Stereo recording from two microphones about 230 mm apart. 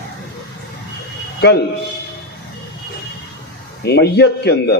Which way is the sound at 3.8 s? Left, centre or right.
Left.